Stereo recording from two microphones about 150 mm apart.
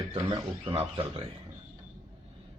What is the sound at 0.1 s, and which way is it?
Speech, 35° right (ahead or behind).